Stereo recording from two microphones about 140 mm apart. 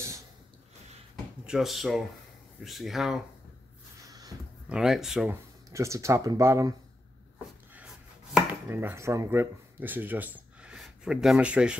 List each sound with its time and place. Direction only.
1.4 s speech: 5° right (ahead or behind)
4.1 s a sound: 25° right (ahead or behind)
4.6 s speech: 5° right (ahead or behind)
5.3 s speech: 20° right (ahead or behind)
8.5 s speech: 15° right (ahead or behind)